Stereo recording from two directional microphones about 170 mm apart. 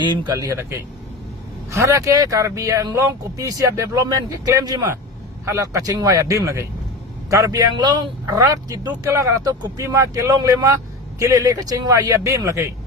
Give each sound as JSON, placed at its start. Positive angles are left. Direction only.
{"t": 0.1, "sound": "speech", "side_deg": -25}